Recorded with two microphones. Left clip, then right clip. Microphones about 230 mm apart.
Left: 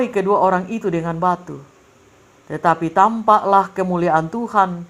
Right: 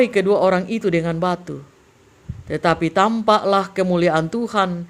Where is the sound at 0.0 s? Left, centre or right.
Right.